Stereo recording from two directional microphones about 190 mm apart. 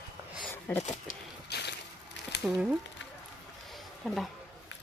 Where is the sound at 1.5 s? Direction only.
60° left (ahead or behind).